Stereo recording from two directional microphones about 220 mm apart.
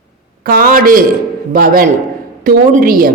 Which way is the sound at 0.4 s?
40° right (ahead or behind).